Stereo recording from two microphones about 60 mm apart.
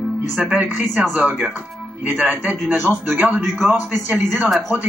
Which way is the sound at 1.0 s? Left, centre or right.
Centre.